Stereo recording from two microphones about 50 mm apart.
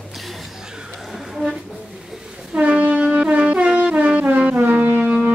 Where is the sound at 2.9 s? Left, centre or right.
Right.